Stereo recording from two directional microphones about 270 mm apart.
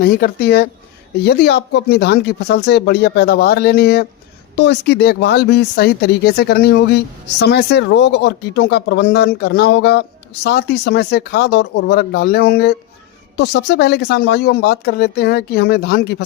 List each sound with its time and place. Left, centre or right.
0.0 s speech: left